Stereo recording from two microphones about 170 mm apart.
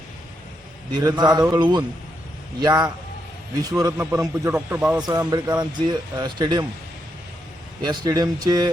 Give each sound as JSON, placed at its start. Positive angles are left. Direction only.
{"t": 0.9, "sound": "a man's voice", "side_deg": -25}
{"t": 4.9, "sound": "speech", "side_deg": -25}
{"t": 7.9, "sound": "speech", "side_deg": -20}